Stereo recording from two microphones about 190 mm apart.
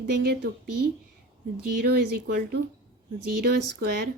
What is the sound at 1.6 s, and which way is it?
Speech, 55° right (ahead or behind).